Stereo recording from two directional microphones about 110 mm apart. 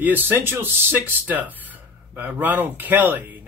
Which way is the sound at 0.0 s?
20° right (ahead or behind).